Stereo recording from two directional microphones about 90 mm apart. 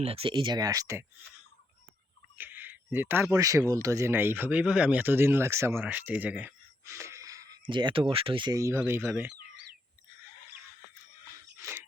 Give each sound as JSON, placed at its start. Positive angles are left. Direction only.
{"t": 0.1, "sound": "speech", "side_deg": -80}
{"t": 2.4, "sound": "a sound", "side_deg": -20}
{"t": 3.3, "sound": "speech", "side_deg": -40}
{"t": 4.1, "sound": "speech", "side_deg": -25}
{"t": 6.8, "sound": "a sound", "side_deg": -30}
{"t": 7.6, "sound": "speech", "side_deg": -60}
{"t": 8.5, "sound": "speech", "side_deg": -35}
{"t": 9.0, "sound": "speech", "side_deg": -15}
{"t": 11.6, "sound": "a sound", "side_deg": -30}